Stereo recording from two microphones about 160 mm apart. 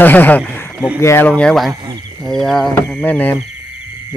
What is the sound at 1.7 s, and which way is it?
Speech, 25° right (ahead or behind).